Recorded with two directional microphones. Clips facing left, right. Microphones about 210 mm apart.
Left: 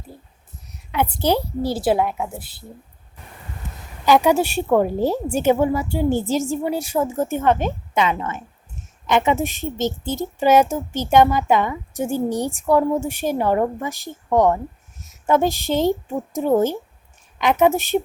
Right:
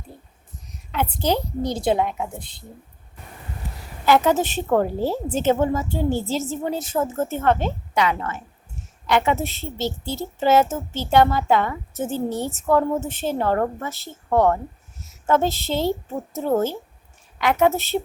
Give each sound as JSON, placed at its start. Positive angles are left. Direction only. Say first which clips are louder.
{"t": 1.2, "sound": "a child's voice", "louder": "left 2 dB", "side_deg": 10}
{"t": 4.0, "sound": "a child's voice", "louder": "left 2 dB", "side_deg": 15}